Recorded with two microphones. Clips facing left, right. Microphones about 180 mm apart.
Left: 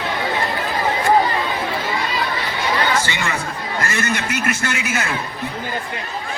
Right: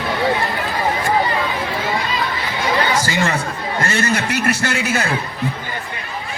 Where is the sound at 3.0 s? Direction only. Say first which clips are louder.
Right 4 dB; 35° right (ahead or behind).